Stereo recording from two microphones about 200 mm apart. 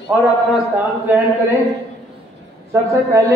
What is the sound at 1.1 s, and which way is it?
Speech, 10° right (ahead or behind).